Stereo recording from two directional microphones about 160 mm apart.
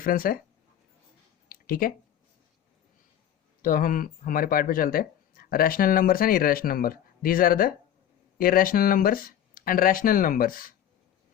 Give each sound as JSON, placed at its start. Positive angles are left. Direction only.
{"t": 0.0, "sound": "speech", "side_deg": 65}
{"t": 1.5, "sound": "a sound", "side_deg": 65}
{"t": 3.6, "sound": "speech", "side_deg": 60}